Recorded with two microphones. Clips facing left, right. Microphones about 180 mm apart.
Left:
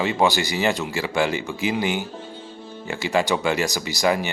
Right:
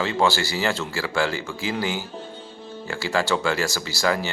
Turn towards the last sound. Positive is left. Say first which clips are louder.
# left 2 dB
turn(degrees=20)  # may be behind; listen again after turning